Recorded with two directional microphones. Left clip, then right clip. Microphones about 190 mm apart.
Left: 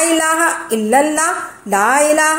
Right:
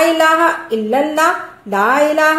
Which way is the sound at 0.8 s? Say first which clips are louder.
Even; 30° left (ahead or behind).